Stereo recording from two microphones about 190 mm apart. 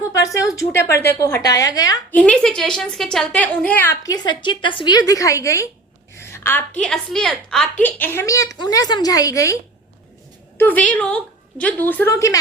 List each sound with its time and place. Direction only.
0.2 s a woman's voice: 15° left (ahead or behind)
2.1 s a woman's voice: 5° left (ahead or behind)
10.6 s a woman's voice: 10° left (ahead or behind)